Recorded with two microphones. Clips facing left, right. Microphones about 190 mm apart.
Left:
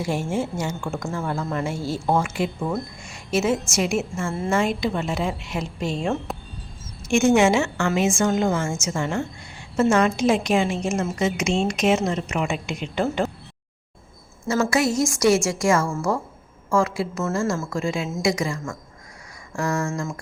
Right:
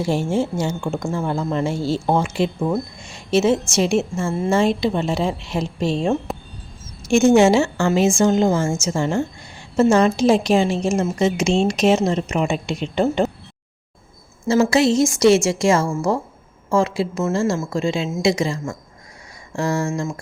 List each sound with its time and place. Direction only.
0.0 s a woman's voice: 30° right (ahead or behind)
14.4 s a woman's voice: 30° right (ahead or behind)